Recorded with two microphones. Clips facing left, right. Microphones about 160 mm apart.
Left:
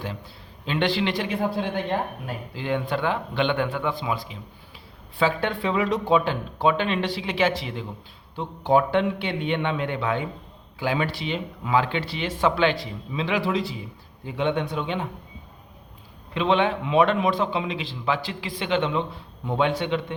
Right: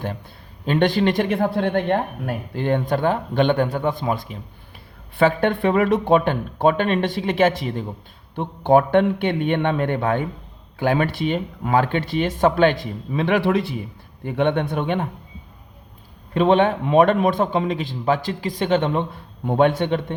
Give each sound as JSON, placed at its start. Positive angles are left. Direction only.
{"t": 0.6, "sound": "a man's voice", "side_deg": -50}
{"t": 16.3, "sound": "a man's voice", "side_deg": -45}